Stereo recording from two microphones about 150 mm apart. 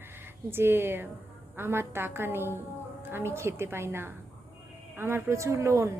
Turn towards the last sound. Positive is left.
turn(degrees=-20)  # may be behind; listen again after turning